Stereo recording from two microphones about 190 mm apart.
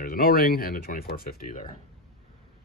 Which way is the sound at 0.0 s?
50° left (ahead or behind).